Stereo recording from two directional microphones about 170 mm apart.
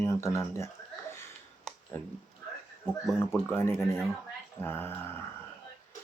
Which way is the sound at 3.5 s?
15° left (ahead or behind).